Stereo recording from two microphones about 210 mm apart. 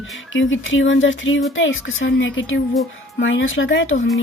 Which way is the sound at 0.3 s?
65° left (ahead or behind).